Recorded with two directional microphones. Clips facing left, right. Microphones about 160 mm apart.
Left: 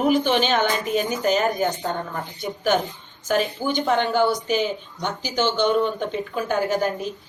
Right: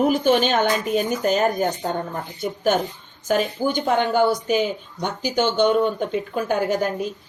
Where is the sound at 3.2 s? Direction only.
45° right (ahead or behind).